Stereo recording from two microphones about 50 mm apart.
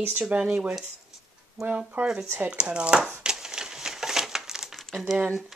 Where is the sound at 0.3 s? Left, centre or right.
Right.